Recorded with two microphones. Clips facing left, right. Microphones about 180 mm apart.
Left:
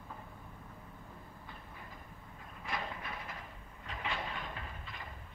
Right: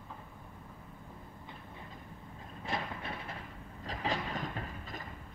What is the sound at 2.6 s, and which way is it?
Train, 30° right (ahead or behind).